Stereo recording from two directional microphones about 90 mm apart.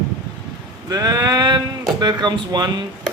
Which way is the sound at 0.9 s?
45° right (ahead or behind).